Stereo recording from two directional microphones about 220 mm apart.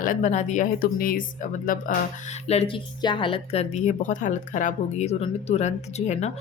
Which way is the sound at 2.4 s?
25° left (ahead or behind).